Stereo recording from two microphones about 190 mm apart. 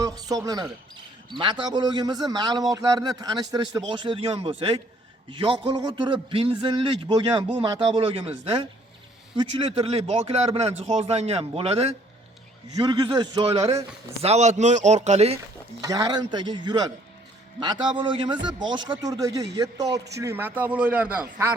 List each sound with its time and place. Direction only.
0.0 s a man's voice: 20° right (ahead or behind)
12.7 s a man's voice: 20° right (ahead or behind)
15.8 s a man's voice: 20° right (ahead or behind)